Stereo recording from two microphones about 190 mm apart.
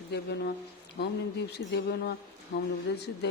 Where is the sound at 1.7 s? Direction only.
60° left (ahead or behind).